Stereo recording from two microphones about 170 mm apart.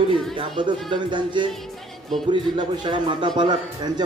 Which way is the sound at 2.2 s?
25° right (ahead or behind).